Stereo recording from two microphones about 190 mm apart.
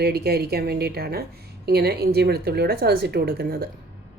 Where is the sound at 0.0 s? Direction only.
55° right (ahead or behind).